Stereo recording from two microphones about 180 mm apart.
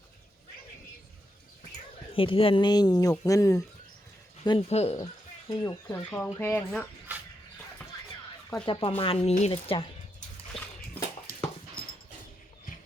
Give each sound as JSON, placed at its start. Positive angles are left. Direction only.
{"t": 2.1, "sound": "speech", "side_deg": 30}
{"t": 4.4, "sound": "speech", "side_deg": 30}
{"t": 5.5, "sound": "speech", "side_deg": 15}
{"t": 8.6, "sound": "speech", "side_deg": 30}